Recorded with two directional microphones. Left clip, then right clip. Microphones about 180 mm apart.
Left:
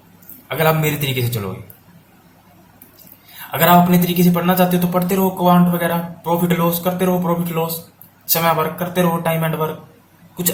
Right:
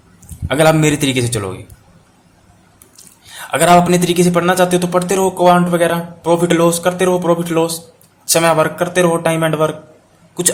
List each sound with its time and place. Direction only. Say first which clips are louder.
0.4 s speech: right 6 dB; 50° right (ahead or behind)
3.3 s speech: right 3 dB; 50° right (ahead or behind)